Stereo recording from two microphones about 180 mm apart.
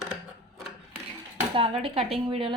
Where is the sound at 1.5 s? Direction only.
30° right (ahead or behind).